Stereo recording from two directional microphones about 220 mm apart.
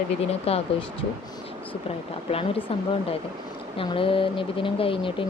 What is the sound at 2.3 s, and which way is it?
Speech, 25° left (ahead or behind).